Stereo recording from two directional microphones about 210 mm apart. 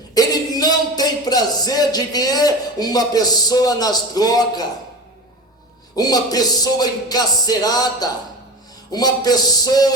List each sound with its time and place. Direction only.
0.1 s speech: 20° left (ahead or behind)
6.0 s music: 20° left (ahead or behind)